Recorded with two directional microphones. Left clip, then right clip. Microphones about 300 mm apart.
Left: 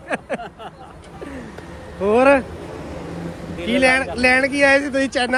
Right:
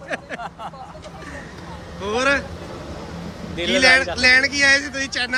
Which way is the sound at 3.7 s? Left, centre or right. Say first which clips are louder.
Right 2 dB; centre.